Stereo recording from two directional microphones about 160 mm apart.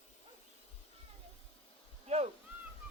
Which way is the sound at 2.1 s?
40° right (ahead or behind).